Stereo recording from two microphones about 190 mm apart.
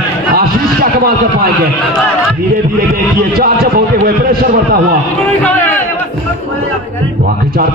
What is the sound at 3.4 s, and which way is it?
A man's voice, 50° right (ahead or behind).